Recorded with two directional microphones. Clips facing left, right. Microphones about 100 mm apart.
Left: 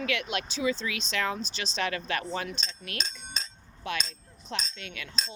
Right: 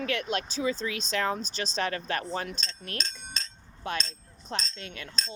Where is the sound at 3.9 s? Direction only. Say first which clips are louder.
Right 1 dB; 45° right (ahead or behind).